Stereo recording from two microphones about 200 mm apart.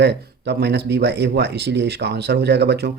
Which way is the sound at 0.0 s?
55° right (ahead or behind).